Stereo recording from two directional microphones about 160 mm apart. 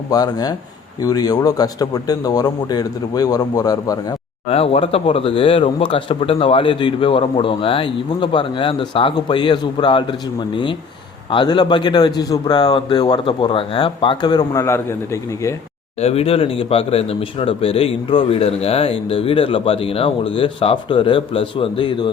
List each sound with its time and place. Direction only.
0.1 s a man's voice: 25° left (ahead or behind)
4.4 s a man's voice: 40° left (ahead or behind); by 15.5 s 15° left (ahead or behind)
16.0 s speech: 40° left (ahead or behind)